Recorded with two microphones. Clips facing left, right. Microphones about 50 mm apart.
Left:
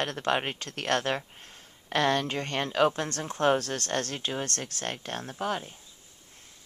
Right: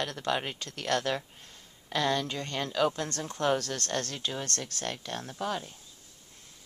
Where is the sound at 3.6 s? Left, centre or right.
Left.